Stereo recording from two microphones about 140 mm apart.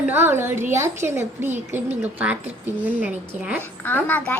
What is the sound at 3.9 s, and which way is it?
Speech, 10° left (ahead or behind).